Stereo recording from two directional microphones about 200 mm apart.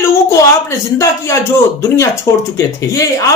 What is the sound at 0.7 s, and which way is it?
Speech, 15° left (ahead or behind).